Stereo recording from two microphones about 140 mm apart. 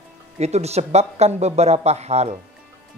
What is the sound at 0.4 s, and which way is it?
A man's voice, 50° right (ahead or behind).